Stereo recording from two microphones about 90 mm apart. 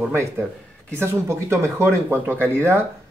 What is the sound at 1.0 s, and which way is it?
Speech, 30° right (ahead or behind).